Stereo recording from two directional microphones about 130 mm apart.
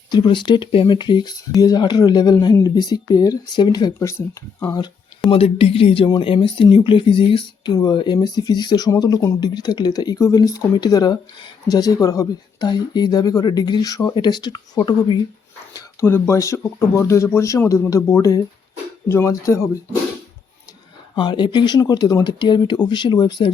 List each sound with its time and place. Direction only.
0.1 s speech: 35° left (ahead or behind)
4.1 s speech: 20° left (ahead or behind)
5.3 s speech: 45° left (ahead or behind); by 19.7 s 20° left (ahead or behind)
21.2 s speech: 35° left (ahead or behind)